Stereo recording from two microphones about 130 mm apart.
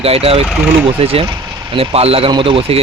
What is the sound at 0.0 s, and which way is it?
Speech, 50° right (ahead or behind).